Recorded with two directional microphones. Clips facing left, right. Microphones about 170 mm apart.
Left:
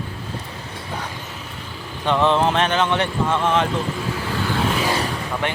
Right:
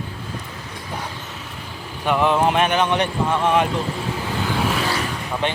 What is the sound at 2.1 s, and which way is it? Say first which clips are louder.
Speech: even; 10° right (ahead or behind).